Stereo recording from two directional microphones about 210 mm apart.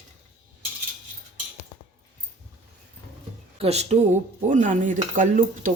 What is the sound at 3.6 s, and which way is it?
Dishes, 30° right (ahead or behind).